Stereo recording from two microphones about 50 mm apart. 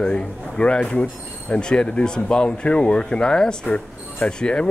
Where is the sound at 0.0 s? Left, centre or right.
Left.